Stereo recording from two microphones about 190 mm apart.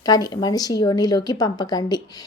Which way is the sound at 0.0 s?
20° left (ahead or behind).